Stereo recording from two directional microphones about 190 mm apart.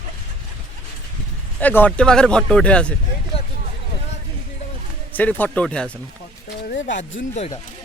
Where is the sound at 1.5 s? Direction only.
10° left (ahead or behind).